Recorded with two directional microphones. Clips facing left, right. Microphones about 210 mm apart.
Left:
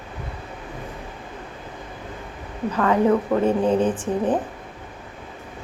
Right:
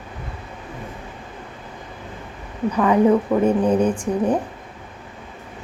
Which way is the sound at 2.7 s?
15° right (ahead or behind).